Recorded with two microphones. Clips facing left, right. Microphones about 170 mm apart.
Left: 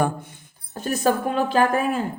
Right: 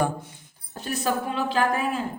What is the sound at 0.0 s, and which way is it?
Speech, 55° left (ahead or behind).